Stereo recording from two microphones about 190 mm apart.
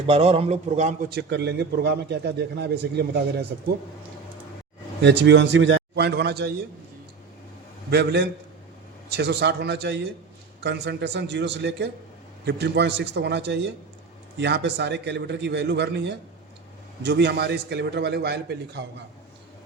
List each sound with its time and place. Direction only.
0.1 s a man's voice: 30° right (ahead or behind)
1.1 s a man's voice: 60° right (ahead or behind)
5.0 s a man's voice: 65° right (ahead or behind)
7.9 s a man's voice: 60° right (ahead or behind)